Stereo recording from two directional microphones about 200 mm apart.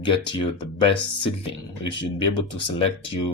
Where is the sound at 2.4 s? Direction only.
25° left (ahead or behind).